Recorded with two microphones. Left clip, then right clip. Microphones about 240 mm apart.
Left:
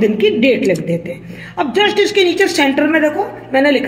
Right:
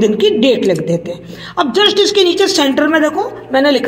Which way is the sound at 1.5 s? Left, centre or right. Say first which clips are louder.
Right 2 dB; right.